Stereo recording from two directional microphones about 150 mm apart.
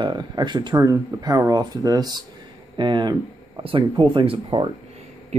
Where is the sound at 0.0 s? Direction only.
30° right (ahead or behind).